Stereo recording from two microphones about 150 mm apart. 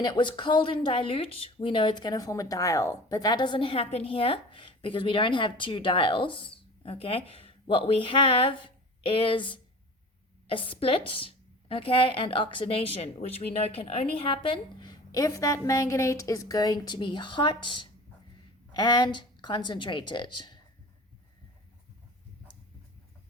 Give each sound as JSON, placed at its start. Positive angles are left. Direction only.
{"t": 0.0, "sound": "a woman's voice", "side_deg": 30}